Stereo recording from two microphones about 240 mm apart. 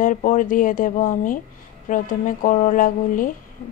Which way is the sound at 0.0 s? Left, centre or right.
Left.